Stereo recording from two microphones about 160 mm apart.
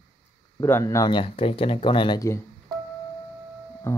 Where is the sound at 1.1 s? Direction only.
35° left (ahead or behind).